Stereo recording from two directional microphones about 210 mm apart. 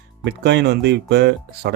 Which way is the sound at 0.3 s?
55° right (ahead or behind).